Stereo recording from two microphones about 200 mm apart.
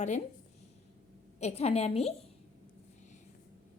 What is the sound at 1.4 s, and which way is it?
Speech, 35° left (ahead or behind).